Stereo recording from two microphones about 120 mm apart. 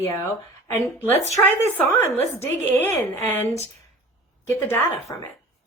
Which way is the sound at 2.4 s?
20° left (ahead or behind).